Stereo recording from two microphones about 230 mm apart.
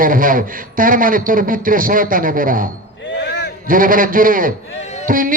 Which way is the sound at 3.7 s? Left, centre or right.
Right.